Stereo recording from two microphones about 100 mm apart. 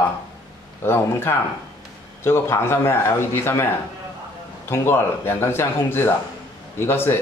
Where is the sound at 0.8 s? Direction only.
25° left (ahead or behind).